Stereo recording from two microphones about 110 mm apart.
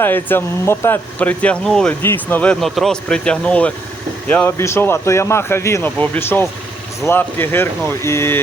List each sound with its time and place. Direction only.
0.0 s speech: 20° left (ahead or behind)
2.0 s speech: 20° left (ahead or behind)
2.6 s speech: centre (ahead or behind)
4.4 s speech: 25° left (ahead or behind)